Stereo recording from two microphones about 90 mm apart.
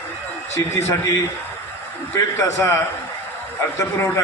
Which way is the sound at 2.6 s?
30° left (ahead or behind).